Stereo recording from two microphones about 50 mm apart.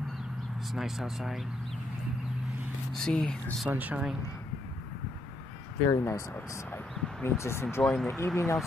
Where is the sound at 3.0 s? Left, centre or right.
Centre.